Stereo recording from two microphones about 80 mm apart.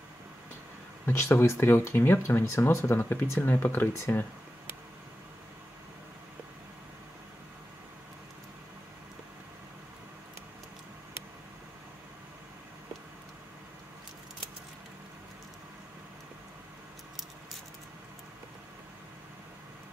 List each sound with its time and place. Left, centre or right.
1.0 s speech: left